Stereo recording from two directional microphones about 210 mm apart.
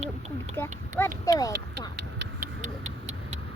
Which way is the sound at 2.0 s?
55° right (ahead or behind).